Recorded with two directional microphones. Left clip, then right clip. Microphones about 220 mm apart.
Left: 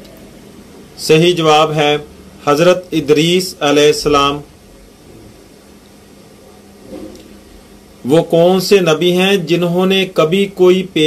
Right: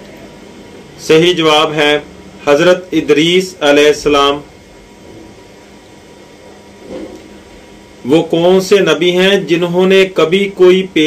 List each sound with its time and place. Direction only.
1.0 s speech: 55° left (ahead or behind)
8.1 s speech: 55° left (ahead or behind)